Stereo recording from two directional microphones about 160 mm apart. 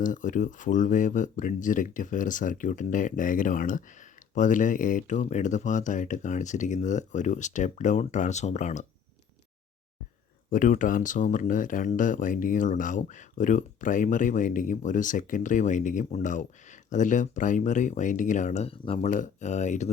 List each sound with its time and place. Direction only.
0.0 s speech: 55° left (ahead or behind)
10.5 s speech: 55° left (ahead or behind); by 18.9 s 40° left (ahead or behind)
19.0 s speech: 50° left (ahead or behind)